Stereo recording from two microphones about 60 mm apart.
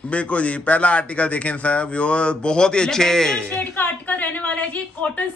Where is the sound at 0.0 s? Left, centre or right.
Left.